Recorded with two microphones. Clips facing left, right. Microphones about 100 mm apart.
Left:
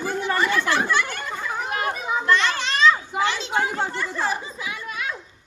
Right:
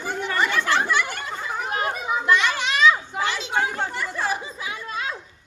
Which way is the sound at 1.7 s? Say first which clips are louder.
Right 1 dB; 30° right (ahead or behind).